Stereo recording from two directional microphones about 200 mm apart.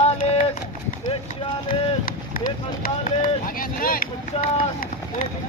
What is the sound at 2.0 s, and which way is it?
Speech, 45° left (ahead or behind).